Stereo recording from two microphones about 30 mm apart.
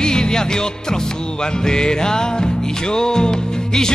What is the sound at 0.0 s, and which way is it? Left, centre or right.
Music, left.